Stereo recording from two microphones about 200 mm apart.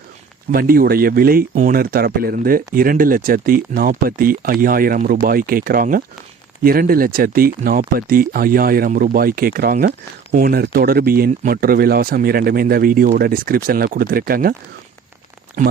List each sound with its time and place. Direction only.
0.5 s speech: 45° right (ahead or behind)
15.6 s speech: 40° right (ahead or behind)